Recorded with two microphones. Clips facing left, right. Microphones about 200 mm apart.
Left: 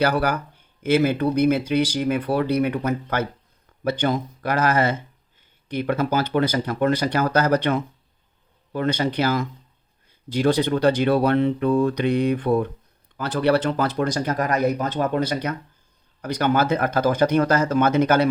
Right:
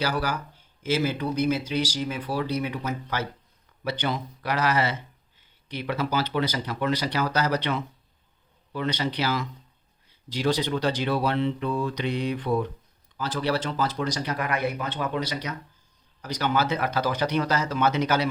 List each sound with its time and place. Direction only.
0.0 s speech: 55° left (ahead or behind)